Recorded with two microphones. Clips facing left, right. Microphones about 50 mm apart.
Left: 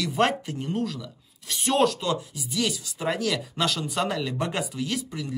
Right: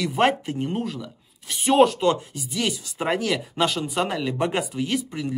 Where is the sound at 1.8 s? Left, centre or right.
Right.